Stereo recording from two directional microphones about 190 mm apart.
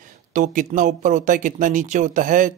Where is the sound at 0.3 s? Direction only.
40° right (ahead or behind).